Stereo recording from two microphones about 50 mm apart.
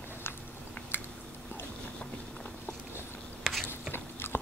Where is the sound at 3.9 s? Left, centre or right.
Left.